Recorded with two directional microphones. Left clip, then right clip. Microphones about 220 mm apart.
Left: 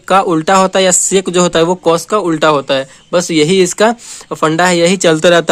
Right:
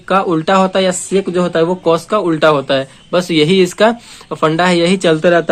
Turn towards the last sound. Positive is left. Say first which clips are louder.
# left 2 dB
turn(degrees=45)  # may be behind; listen again after turning